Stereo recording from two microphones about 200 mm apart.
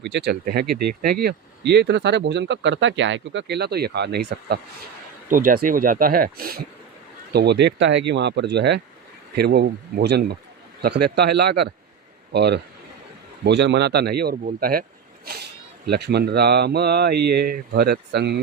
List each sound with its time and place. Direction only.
0.0 s speech: 60° right (ahead or behind)
5.3 s speech: 40° right (ahead or behind)